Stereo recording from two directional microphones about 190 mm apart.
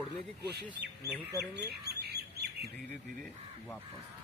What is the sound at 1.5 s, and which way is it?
Squawk, 60° right (ahead or behind).